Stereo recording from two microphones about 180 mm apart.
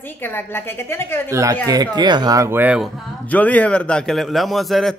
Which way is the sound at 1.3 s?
15° right (ahead or behind).